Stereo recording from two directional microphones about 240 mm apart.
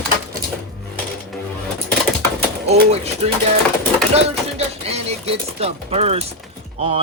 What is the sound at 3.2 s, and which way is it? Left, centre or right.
Speech, right.